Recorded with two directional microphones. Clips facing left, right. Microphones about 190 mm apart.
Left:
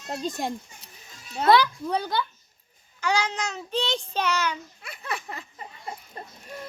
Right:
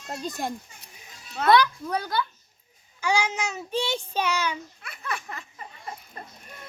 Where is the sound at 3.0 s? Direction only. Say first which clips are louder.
Right 1 dB; 10° right (ahead or behind).